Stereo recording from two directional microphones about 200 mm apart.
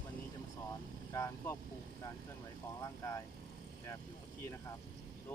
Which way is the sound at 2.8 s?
15° left (ahead or behind).